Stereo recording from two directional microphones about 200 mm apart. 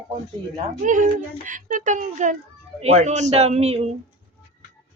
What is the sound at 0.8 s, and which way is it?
A child's voice, 40° right (ahead or behind).